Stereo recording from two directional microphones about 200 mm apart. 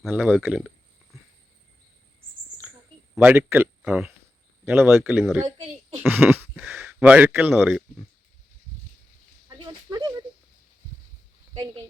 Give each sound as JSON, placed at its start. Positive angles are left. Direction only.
{"t": 0.0, "sound": "speech", "side_deg": -5}
{"t": 3.2, "sound": "speech", "side_deg": -10}
{"t": 9.5, "sound": "a sound", "side_deg": -20}